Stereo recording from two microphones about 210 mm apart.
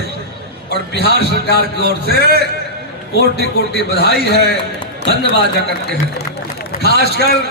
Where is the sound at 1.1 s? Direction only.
50° right (ahead or behind).